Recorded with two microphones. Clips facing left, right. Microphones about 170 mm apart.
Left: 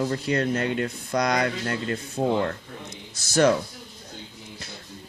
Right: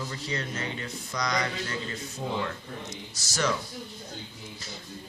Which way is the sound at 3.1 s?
55° left (ahead or behind).